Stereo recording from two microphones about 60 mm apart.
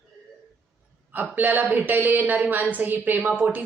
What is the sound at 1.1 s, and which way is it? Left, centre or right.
A woman's voice, right.